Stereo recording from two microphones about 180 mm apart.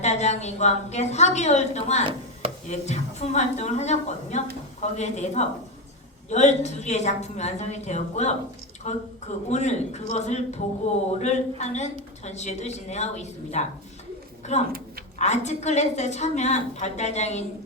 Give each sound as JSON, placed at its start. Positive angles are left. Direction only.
{"t": 0.0, "sound": "a woman's voice", "side_deg": 40}